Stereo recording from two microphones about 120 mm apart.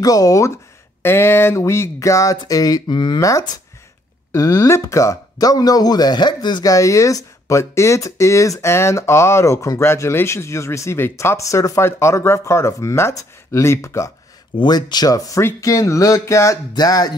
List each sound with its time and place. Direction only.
0.0 s speech: 30° left (ahead or behind)
3.3 s speech: 30° left (ahead or behind)
14.6 s speech: 35° left (ahead or behind)